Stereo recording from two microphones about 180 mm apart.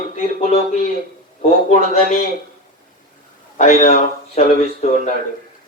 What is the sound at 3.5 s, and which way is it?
A man's voice, 45° left (ahead or behind).